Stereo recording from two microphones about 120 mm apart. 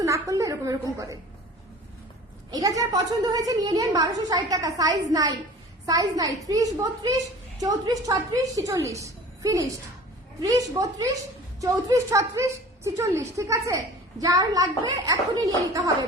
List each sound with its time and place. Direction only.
0.0 s a woman's voice: 30° right (ahead or behind)
2.5 s a woman's voice: 30° right (ahead or behind)